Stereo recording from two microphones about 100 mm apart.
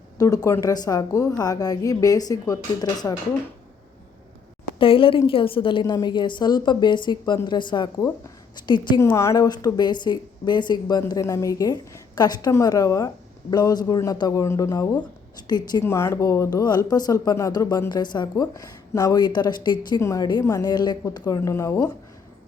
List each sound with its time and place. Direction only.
0.2 s a woman's voice: 35° left (ahead or behind)
4.8 s a woman's voice: 60° left (ahead or behind)
5.8 s a woman's voice: 45° left (ahead or behind)
9.1 s speech: 30° left (ahead or behind)
11.1 s a woman's voice: 35° left (ahead or behind)
15.8 s a woman's voice: 25° left (ahead or behind); by 20.0 s 45° left (ahead or behind)
20.0 s a woman's voice: 30° left (ahead or behind)
21.2 s speech: 30° left (ahead or behind)